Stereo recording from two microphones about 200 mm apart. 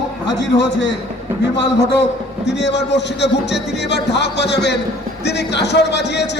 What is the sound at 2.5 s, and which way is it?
A man's voice, 60° left (ahead or behind).